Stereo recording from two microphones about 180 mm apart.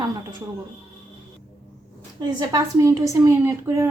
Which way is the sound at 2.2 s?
20° right (ahead or behind).